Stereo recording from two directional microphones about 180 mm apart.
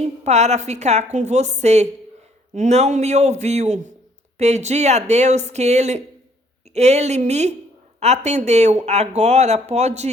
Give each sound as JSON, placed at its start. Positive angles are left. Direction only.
{"t": 0.3, "sound": "speech", "side_deg": -40}